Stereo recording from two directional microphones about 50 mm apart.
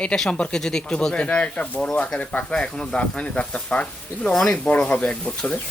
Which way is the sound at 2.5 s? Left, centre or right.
Centre.